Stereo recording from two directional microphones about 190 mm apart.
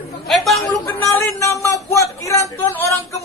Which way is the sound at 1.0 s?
15° left (ahead or behind).